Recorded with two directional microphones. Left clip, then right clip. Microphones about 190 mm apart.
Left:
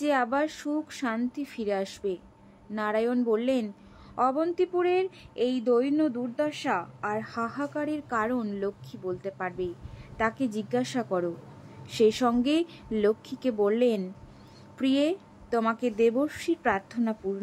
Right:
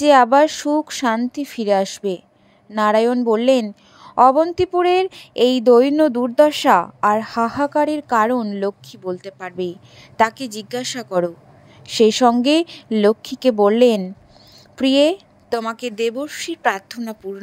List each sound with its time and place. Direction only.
0.0 s a woman's voice: 45° right (ahead or behind)